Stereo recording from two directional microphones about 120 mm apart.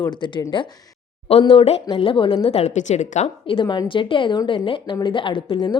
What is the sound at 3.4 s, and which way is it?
A woman's voice, 45° left (ahead or behind).